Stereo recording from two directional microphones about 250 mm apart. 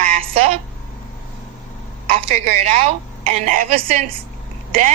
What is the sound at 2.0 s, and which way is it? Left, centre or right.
A woman's voice, right.